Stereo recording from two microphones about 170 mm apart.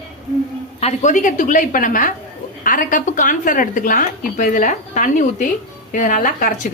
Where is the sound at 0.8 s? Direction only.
40° left (ahead or behind).